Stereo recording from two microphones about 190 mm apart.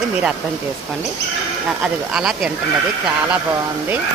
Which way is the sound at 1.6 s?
5° right (ahead or behind).